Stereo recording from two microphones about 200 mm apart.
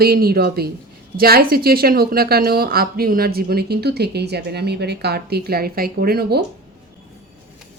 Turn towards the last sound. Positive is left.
turn(degrees=-50)  # may be behind; listen again after turning